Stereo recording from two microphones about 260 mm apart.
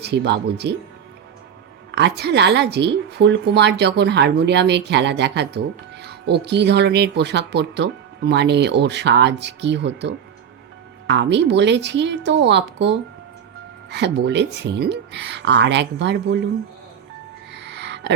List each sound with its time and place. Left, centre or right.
0.0 s a woman's voice: right
1.9 s a woman's voice: right
17.5 s a sound: right